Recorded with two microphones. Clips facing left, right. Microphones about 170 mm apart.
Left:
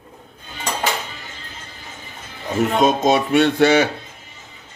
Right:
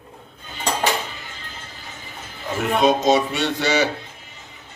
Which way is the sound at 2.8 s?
55° left (ahead or behind).